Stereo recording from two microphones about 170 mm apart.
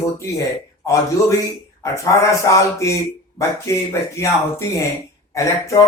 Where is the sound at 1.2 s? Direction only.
20° left (ahead or behind).